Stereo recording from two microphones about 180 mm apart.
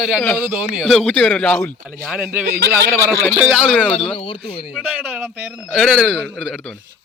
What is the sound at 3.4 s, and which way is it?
Speech, 5° right (ahead or behind).